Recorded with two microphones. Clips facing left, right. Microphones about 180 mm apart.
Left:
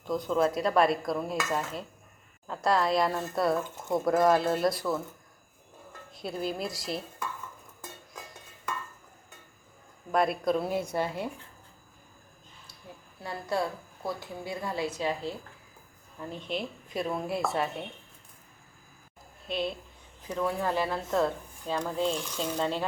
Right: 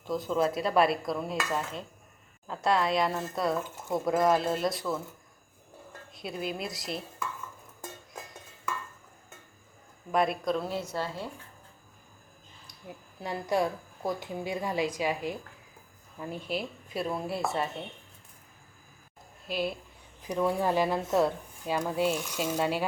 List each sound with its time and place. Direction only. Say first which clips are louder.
0.0 s speech: left 1 dB; centre (ahead or behind)
6.5 s speech: left 2 dB; centre (ahead or behind)
10.1 s speech: left 1 dB; centre (ahead or behind)
10.7 s a woman's voice: left 3 dB; 50° left (ahead or behind)
10.9 s speech: left 3 dB; 15° left (ahead or behind)
12.6 s a woman's voice: right 3 dB; 15° right (ahead or behind); by 17.8 s centre (ahead or behind)
19.5 s speech: even; 5° right (ahead or behind)